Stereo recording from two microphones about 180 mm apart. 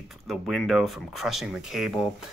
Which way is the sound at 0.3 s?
Centre (ahead or behind).